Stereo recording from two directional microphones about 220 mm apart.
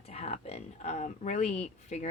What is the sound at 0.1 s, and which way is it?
A woman's voice, 30° left (ahead or behind).